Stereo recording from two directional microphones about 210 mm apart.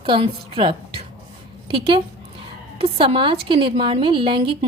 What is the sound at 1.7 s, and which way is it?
A woman's voice, 25° right (ahead or behind).